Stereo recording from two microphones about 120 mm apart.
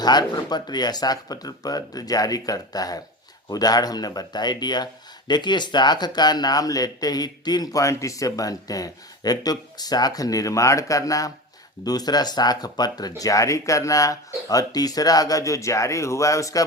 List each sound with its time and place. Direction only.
0.0 s speech: 35° left (ahead or behind)